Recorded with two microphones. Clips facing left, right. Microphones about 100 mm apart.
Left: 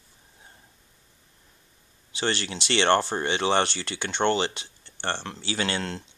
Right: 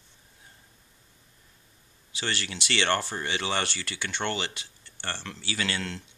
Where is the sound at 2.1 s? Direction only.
30° left (ahead or behind).